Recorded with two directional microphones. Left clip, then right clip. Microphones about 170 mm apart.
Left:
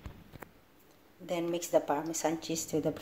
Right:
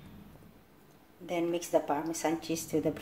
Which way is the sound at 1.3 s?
25° left (ahead or behind).